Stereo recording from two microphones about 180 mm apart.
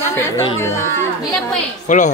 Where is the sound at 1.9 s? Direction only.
45° left (ahead or behind).